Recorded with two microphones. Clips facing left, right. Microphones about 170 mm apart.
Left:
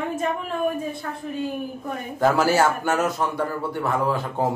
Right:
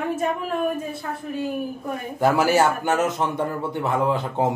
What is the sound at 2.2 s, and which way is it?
A man's voice, 15° right (ahead or behind).